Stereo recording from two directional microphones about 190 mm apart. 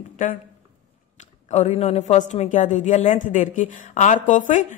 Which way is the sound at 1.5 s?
35° left (ahead or behind).